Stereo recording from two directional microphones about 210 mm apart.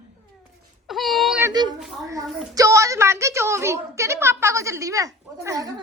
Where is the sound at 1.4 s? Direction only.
20° right (ahead or behind).